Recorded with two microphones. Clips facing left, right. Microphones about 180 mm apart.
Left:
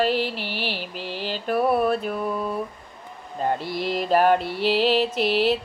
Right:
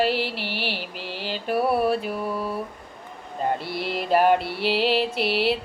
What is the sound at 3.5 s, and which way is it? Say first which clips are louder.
Speech: left 2 dB; 40° left (ahead or behind).